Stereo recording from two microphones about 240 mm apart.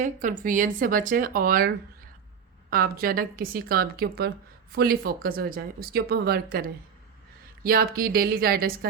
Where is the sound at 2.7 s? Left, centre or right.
Right.